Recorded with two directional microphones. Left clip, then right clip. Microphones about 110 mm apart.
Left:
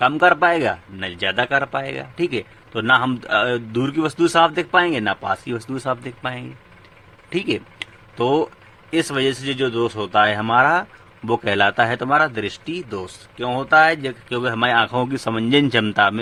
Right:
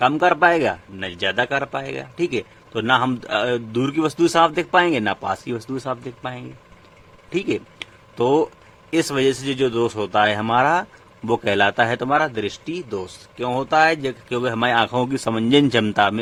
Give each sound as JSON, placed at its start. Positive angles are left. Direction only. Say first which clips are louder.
{"t": 0.0, "sound": "speech", "louder": "left 1 dB", "side_deg": -25}
{"t": 4.2, "sound": "speech", "louder": "left 1 dB", "side_deg": -40}
{"t": 5.5, "sound": "speech", "louder": "left 2 dB", "side_deg": -20}
{"t": 7.3, "sound": "a sound", "louder": "even", "side_deg": -20}
{"t": 8.1, "sound": "a man's voice", "louder": "right 1 dB", "side_deg": -40}